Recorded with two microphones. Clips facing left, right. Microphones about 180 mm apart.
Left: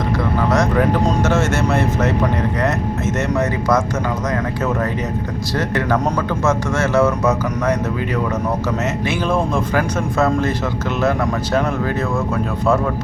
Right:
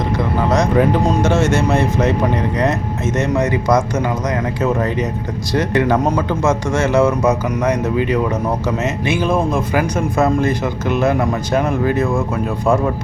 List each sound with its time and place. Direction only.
0.5 s speech: 20° right (ahead or behind)
3.2 s speech: 15° right (ahead or behind)
5.5 s speech: 15° right (ahead or behind)
11.5 s speech: 15° right (ahead or behind)